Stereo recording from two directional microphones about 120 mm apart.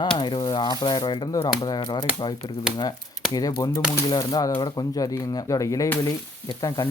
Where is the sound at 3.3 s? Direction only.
30° left (ahead or behind).